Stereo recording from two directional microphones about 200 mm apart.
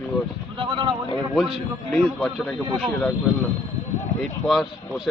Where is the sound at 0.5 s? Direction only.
25° right (ahead or behind).